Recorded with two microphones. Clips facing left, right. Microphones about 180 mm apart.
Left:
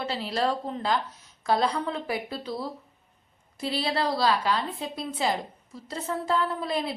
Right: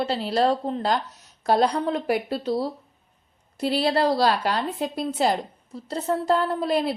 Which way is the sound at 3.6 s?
65° right (ahead or behind).